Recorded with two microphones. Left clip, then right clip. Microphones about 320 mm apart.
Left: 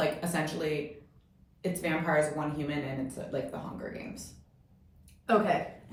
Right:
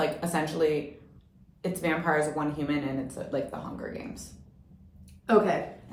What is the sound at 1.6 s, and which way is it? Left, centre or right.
Speech, centre.